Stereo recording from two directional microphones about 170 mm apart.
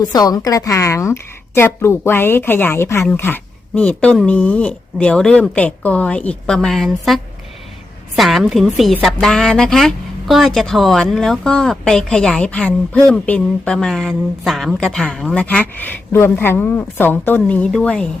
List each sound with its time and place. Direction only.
0.0 s a woman's voice: 20° left (ahead or behind); by 18.1 s 5° left (ahead or behind)